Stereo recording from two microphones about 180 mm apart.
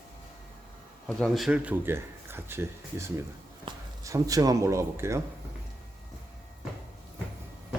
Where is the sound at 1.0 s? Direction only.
Centre (ahead or behind); by 5.2 s 15° right (ahead or behind).